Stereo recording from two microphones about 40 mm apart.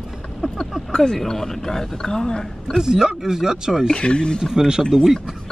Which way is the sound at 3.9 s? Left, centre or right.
Left.